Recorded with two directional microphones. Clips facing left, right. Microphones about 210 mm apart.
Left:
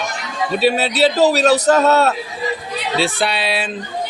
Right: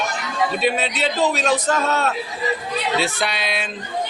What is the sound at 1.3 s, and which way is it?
Speech, 40° left (ahead or behind).